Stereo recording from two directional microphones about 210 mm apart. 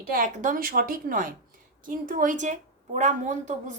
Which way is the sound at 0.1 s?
40° right (ahead or behind).